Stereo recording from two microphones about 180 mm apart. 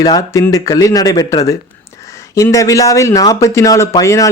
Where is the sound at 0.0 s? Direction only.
20° left (ahead or behind).